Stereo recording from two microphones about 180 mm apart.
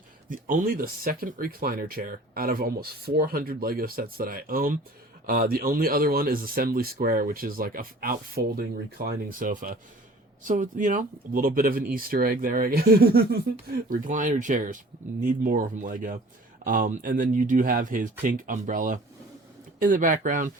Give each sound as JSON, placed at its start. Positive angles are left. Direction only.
{"t": 0.3, "sound": "speech", "side_deg": -50}